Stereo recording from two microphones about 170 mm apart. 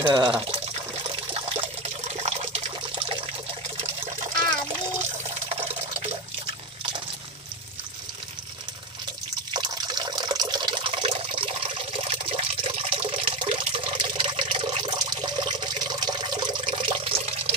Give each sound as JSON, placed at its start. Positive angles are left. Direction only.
{"t": 0.0, "sound": "speech", "side_deg": -25}
{"t": 1.3, "sound": "water", "side_deg": -35}
{"t": 5.5, "sound": "water", "side_deg": -35}
{"t": 9.5, "sound": "water", "side_deg": -25}